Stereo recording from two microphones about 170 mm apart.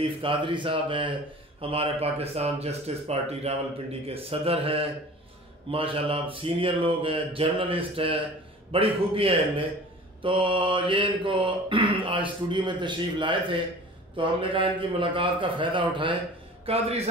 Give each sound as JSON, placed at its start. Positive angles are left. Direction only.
{"t": 0.2, "sound": "mantra", "side_deg": -30}
{"t": 1.6, "sound": "speech", "side_deg": -35}
{"t": 10.2, "sound": "mantra", "side_deg": -30}
{"t": 16.6, "sound": "speech", "side_deg": -35}